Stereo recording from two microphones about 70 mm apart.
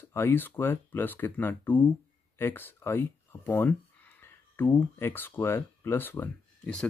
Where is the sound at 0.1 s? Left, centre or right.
Left.